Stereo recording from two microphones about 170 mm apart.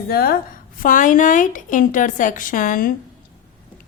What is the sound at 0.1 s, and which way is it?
A woman's voice, 70° left (ahead or behind).